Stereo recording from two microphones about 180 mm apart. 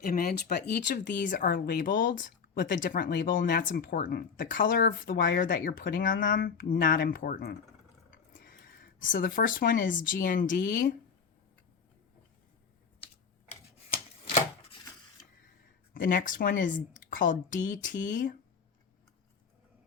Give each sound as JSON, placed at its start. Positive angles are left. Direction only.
{"t": 0.0, "sound": "speech", "side_deg": 55}
{"t": 3.2, "sound": "speech", "side_deg": 65}
{"t": 9.0, "sound": "speech", "side_deg": 50}
{"t": 16.0, "sound": "speech", "side_deg": 50}